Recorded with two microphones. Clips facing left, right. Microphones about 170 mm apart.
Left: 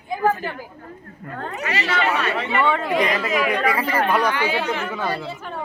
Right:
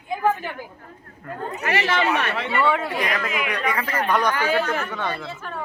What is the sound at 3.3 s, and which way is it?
Speech, 45° left (ahead or behind).